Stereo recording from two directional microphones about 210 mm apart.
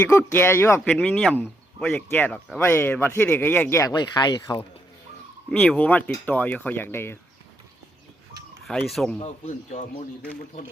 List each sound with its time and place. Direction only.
0.0 s speech: 10° left (ahead or behind)
5.5 s speech: 5° left (ahead or behind)
8.9 s a man's voice: centre (ahead or behind)
9.2 s a man's voice: 35° left (ahead or behind)